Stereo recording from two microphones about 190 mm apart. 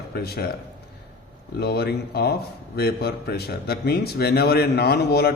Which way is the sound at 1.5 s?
55° left (ahead or behind).